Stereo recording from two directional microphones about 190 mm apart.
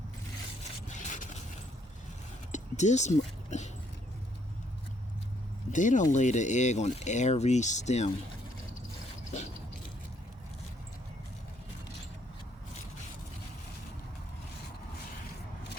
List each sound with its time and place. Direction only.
0.9 s scrape: 40° left (ahead or behind)
2.5 s speech: 40° left (ahead or behind)
5.7 s speech: 40° left (ahead or behind)